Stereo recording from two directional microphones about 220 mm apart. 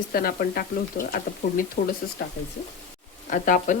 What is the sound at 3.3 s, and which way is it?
Speech, 35° left (ahead or behind).